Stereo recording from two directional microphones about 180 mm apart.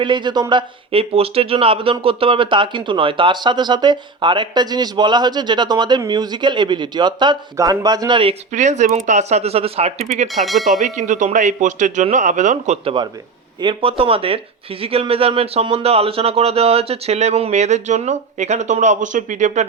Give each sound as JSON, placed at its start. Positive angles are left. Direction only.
{"t": 0.0, "sound": "speech", "side_deg": -25}
{"t": 10.4, "sound": "speech", "side_deg": 0}
{"t": 10.7, "sound": "speech", "side_deg": -40}